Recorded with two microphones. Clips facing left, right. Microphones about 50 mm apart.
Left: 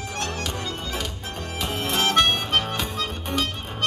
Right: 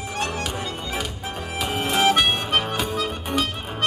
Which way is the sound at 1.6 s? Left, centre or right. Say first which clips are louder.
Right 4 dB; centre.